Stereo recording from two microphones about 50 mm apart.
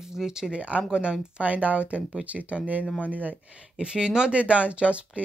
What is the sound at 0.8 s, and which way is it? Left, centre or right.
Speech, centre.